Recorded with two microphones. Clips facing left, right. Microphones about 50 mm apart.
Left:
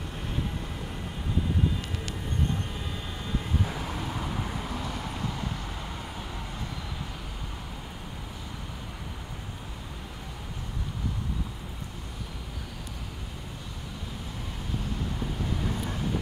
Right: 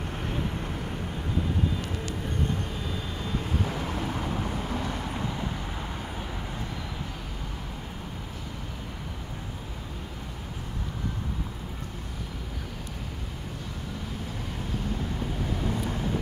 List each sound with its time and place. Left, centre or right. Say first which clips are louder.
3.8 s vehicle: right 3 dB; centre
15.6 s vehicle: right 2 dB; centre